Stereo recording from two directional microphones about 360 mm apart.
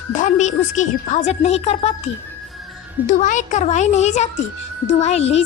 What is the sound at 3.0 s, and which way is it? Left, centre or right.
A woman's voice, left.